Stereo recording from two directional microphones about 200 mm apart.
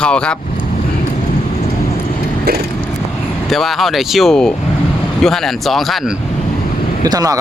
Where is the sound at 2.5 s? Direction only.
50° right (ahead or behind).